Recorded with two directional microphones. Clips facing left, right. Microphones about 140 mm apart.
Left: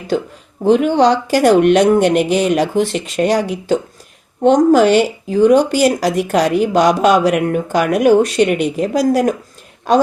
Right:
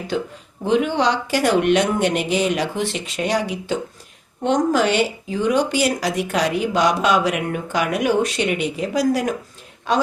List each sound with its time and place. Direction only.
0.6 s speech: 45° left (ahead or behind)